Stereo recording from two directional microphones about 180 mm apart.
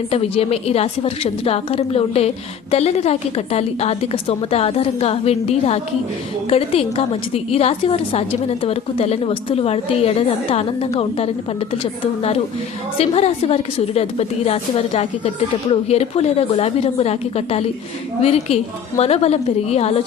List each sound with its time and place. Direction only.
0.1 s a woman's voice: 35° left (ahead or behind)